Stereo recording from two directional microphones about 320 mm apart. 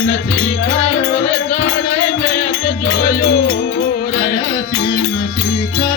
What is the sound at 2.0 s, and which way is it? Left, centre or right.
Music, left.